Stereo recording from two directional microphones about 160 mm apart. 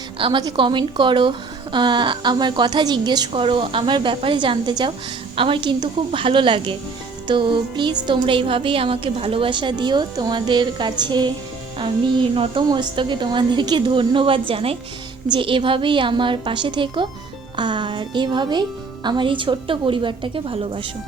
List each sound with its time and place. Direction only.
0.2 s a woman's voice: 30° right (ahead or behind)